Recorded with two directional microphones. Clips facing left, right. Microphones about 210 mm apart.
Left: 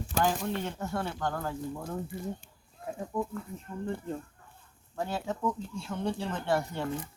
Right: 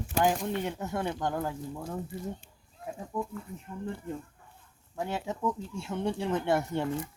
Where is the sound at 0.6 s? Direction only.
15° right (ahead or behind).